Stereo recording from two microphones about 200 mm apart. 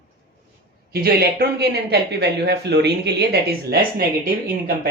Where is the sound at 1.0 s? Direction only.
50° right (ahead or behind).